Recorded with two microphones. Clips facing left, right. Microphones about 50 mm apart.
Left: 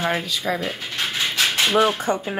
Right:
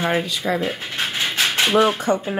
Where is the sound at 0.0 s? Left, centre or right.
Centre.